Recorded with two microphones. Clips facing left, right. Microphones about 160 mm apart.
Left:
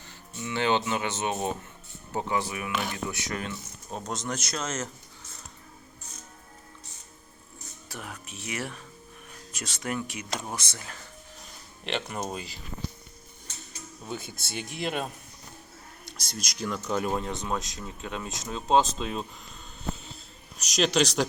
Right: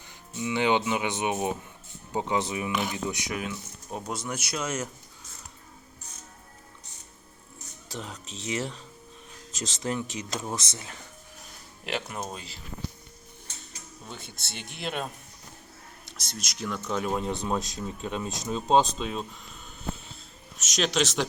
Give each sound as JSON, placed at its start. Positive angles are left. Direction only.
{"t": 0.1, "sound": "speech", "side_deg": -15}
{"t": 7.9, "sound": "speech", "side_deg": -25}
{"t": 11.9, "sound": "speech", "side_deg": -5}
{"t": 14.1, "sound": "speech", "side_deg": 5}
{"t": 16.0, "sound": "speech", "side_deg": 0}
{"t": 18.3, "sound": "speech", "side_deg": 0}
{"t": 20.6, "sound": "speech", "side_deg": 0}